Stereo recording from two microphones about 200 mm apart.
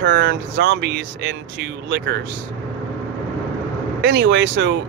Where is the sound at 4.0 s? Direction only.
60° right (ahead or behind).